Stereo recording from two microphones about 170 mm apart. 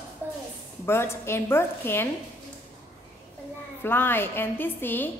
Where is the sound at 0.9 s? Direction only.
15° left (ahead or behind).